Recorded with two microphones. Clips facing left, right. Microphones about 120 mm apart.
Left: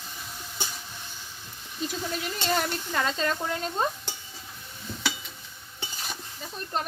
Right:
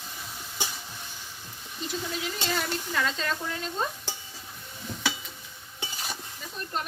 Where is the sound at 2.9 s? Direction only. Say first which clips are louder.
Left 3 dB; 45° left (ahead or behind).